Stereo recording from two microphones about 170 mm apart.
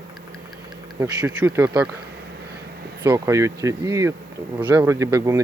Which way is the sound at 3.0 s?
20° right (ahead or behind).